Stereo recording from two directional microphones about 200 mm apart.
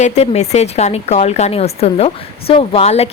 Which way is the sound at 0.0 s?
35° left (ahead or behind).